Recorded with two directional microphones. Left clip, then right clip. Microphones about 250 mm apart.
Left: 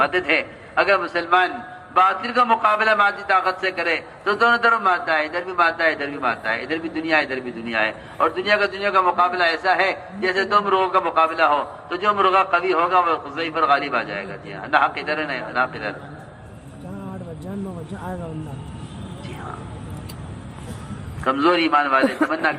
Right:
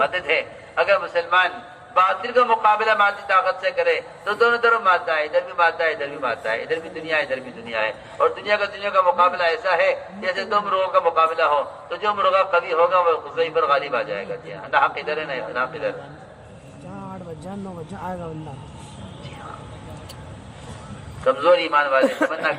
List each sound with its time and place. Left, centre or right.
0.0 s a man's voice: left
21.2 s a man's voice: left